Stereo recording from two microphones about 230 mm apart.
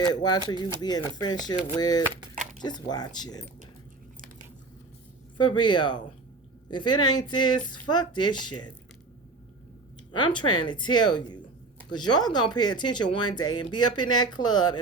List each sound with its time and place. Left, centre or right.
0.0 s speech: centre
2.3 s a sound: right
2.6 s speech: centre
5.5 s speech: centre
10.1 s speech: left